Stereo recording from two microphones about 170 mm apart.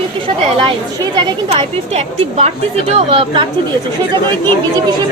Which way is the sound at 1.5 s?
40° right (ahead or behind).